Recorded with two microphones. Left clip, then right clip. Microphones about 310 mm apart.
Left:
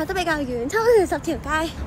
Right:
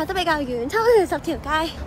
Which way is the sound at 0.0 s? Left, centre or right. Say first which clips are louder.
Right 1 dB; centre.